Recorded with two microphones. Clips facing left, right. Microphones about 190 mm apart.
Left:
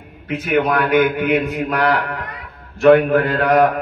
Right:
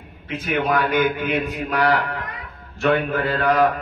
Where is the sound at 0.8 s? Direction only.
60° left (ahead or behind).